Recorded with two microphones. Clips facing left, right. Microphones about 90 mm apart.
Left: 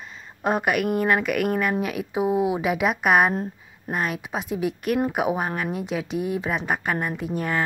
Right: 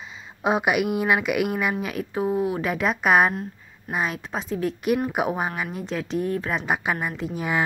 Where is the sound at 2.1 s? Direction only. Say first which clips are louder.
Left 2 dB; 15° left (ahead or behind).